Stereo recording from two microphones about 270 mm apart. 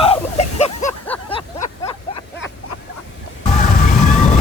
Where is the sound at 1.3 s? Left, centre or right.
Centre.